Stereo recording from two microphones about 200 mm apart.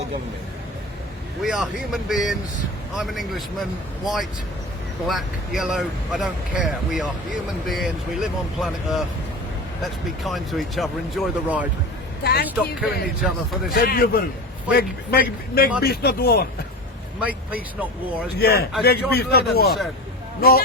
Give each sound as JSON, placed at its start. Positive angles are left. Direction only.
{"t": 1.4, "sound": "speech", "side_deg": 0}
{"t": 12.2, "sound": "speech", "side_deg": 50}
{"t": 12.5, "sound": "speech", "side_deg": -5}
{"t": 13.7, "sound": "speech", "side_deg": 45}
{"t": 17.2, "sound": "speech", "side_deg": -5}
{"t": 18.3, "sound": "speech", "side_deg": 55}